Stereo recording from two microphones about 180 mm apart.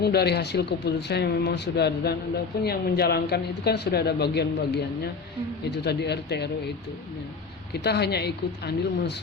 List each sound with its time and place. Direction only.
0.0 s speech: 65° left (ahead or behind)
7.7 s speech: 65° left (ahead or behind)